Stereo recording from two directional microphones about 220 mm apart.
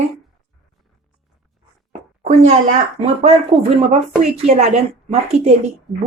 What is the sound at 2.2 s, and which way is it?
Speech, 30° right (ahead or behind).